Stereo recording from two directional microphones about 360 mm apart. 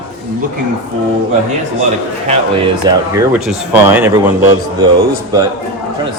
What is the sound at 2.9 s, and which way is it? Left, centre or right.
Speech, centre.